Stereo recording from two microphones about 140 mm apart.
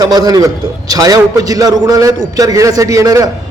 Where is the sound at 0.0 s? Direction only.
25° right (ahead or behind).